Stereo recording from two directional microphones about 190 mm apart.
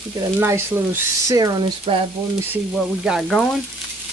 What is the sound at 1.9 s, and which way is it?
Speech, 30° right (ahead or behind).